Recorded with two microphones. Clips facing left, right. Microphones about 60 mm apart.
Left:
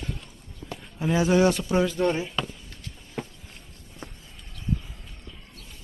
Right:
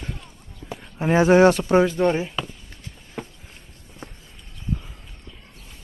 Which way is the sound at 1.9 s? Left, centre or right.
Centre.